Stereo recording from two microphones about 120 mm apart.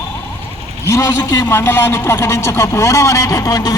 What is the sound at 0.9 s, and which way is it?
A man's voice, 25° left (ahead or behind).